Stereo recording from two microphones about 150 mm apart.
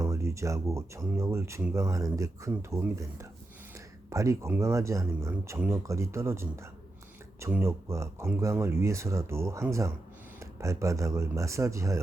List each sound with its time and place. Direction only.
0.0 s speech: 20° right (ahead or behind)